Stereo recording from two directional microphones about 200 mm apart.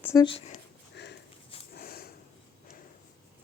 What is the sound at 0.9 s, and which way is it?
Sniff, 55° left (ahead or behind).